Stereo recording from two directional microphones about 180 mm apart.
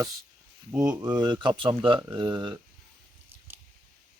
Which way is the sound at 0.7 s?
10° right (ahead or behind).